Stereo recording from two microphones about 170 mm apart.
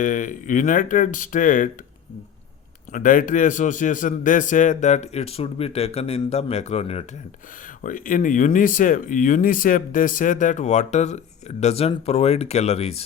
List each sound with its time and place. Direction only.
0.0 s speech: 50° left (ahead or behind)
2.9 s speech: 50° left (ahead or behind)
7.9 s speech: 55° left (ahead or behind)